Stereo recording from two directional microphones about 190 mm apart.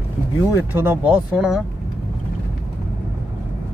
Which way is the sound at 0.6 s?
10° right (ahead or behind).